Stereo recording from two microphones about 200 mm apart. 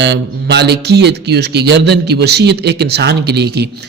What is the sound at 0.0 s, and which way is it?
A man's voice, 60° right (ahead or behind).